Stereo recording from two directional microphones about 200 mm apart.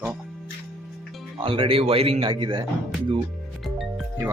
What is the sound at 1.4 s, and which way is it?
A man's voice, 25° right (ahead or behind).